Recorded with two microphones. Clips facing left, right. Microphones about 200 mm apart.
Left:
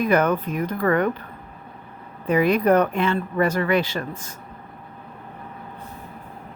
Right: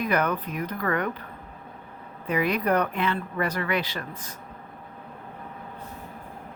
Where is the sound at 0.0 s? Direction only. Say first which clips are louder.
Left 6 dB; 45° left (ahead or behind).